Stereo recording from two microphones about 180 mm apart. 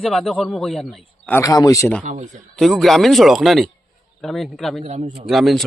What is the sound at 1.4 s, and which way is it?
Speech, 20° left (ahead or behind).